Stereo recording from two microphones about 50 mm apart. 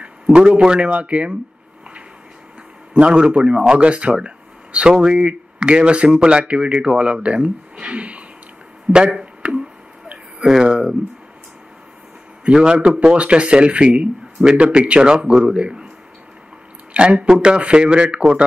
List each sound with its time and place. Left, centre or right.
0.0 s a sound: right
0.6 s speech: centre
2.9 s speech: centre
7.8 s a sound: right
10.4 s speech: centre
12.5 s a man's voice: centre
16.9 s speech: right